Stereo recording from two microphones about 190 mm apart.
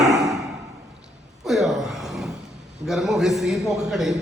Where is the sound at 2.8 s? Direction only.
Centre (ahead or behind).